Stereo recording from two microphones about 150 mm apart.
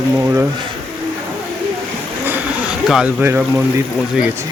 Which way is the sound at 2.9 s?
5° right (ahead or behind).